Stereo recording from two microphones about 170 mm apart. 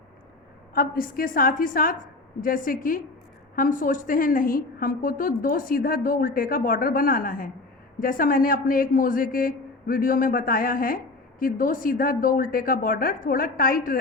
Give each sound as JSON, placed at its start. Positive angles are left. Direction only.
{"t": 0.7, "sound": "a man's voice", "side_deg": 55}